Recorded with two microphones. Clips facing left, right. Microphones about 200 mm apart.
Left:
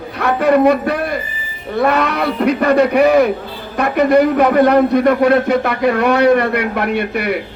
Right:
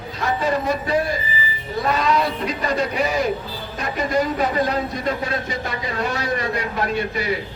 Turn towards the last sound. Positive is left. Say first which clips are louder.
# left 5 dB
turn(degrees=60)  # may be behind; listen again after turning